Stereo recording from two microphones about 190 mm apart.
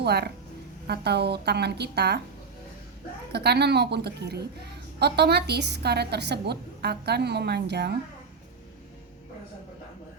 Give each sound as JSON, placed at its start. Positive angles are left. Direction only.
{"t": 0.0, "sound": "a woman's voice", "side_deg": -60}
{"t": 3.3, "sound": "a woman's voice", "side_deg": -60}